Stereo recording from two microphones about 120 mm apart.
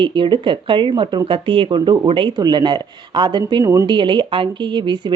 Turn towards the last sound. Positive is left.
turn(degrees=-40)  # may be behind; listen again after turning